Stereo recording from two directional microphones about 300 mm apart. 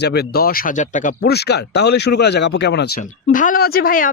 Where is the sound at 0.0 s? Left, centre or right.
Left.